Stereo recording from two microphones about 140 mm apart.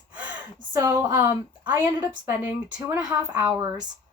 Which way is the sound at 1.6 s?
10° right (ahead or behind).